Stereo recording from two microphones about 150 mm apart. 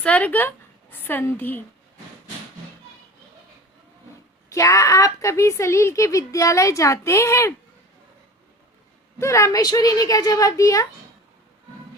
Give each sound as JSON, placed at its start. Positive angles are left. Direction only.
{"t": 0.0, "sound": "a woman's voice", "side_deg": 10}
{"t": 4.4, "sound": "a woman's voice", "side_deg": 20}
{"t": 9.1, "sound": "a woman's voice", "side_deg": 20}